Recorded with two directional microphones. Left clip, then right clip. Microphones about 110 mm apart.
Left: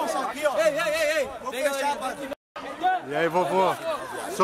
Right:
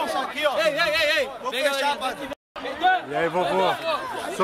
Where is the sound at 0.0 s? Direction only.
Centre (ahead or behind).